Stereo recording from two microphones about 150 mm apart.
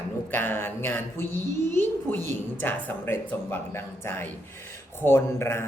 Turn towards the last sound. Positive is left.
turn(degrees=15)  # may be behind; listen again after turning